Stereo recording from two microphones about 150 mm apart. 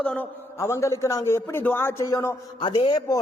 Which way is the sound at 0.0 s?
10° left (ahead or behind).